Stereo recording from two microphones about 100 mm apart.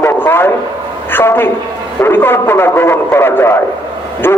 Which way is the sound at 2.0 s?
20° left (ahead or behind).